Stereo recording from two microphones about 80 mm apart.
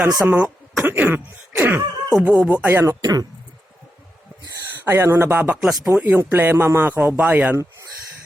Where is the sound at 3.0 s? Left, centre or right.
Right.